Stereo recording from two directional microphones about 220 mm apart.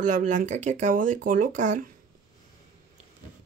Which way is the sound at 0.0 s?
35° right (ahead or behind).